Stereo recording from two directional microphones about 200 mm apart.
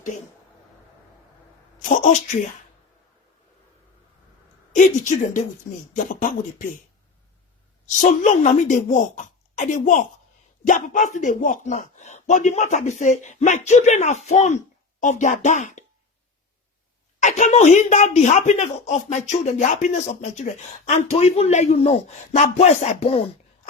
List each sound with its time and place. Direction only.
1.8 s speech: 40° left (ahead or behind)
4.7 s speech: 40° left (ahead or behind)
7.9 s speech: 35° left (ahead or behind)
17.2 s speech: 35° left (ahead or behind)